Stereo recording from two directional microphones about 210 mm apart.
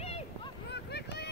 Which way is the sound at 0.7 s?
55° left (ahead or behind).